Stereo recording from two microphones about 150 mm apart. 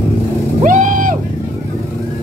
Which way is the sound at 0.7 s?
60° right (ahead or behind).